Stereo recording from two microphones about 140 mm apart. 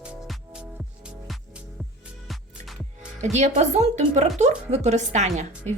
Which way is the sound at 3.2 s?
55° right (ahead or behind).